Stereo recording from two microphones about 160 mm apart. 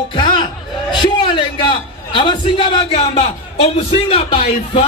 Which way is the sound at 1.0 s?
30° left (ahead or behind).